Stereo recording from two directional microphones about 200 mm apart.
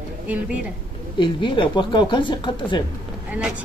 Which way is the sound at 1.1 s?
25° left (ahead or behind).